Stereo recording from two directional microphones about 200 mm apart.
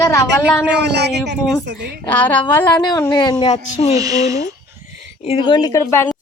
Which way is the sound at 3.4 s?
25° left (ahead or behind).